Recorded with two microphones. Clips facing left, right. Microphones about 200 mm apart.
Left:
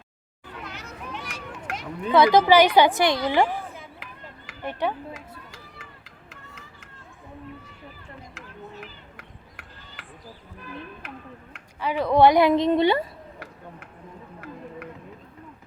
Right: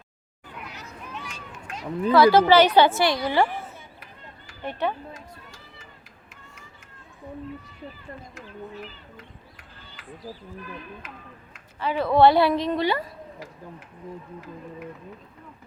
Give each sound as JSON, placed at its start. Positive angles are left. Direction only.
{"t": 0.6, "sound": "children playing", "side_deg": 90}
{"t": 2.1, "sound": "a woman's voice", "side_deg": 20}
{"t": 3.8, "sound": "chop", "side_deg": 90}
{"t": 4.6, "sound": "a woman's voice", "side_deg": 15}
{"t": 9.1, "sound": "a sound", "side_deg": 75}
{"t": 11.0, "sound": "speech", "side_deg": 65}
{"t": 11.8, "sound": "a woman's voice", "side_deg": 15}